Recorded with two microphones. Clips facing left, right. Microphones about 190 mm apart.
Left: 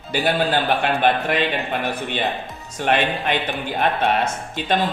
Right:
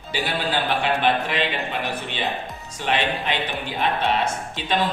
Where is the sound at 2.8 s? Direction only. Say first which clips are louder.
Left 4 dB; 55° left (ahead or behind).